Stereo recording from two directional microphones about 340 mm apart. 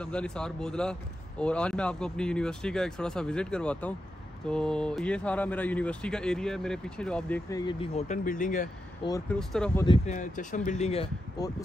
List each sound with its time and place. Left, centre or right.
0.0 s speech: centre; by 8.6 s left
9.0 s speech: centre
9.8 s speech: left